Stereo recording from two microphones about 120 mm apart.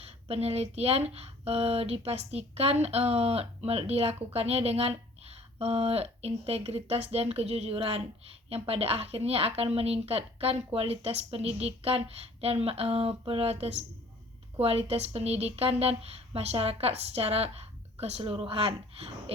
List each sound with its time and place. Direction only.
0.0 s speech: 60° right (ahead or behind)
18.2 s speech: 50° right (ahead or behind)